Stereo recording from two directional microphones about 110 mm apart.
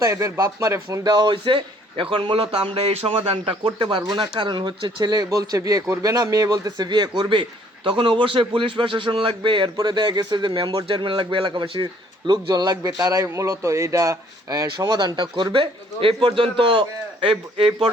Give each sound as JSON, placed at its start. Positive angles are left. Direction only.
{"t": 0.0, "sound": "a man's voice", "side_deg": -30}
{"t": 12.3, "sound": "a man's voice", "side_deg": -40}